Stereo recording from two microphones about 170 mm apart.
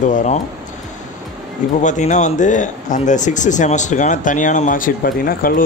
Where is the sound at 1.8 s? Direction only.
45° left (ahead or behind).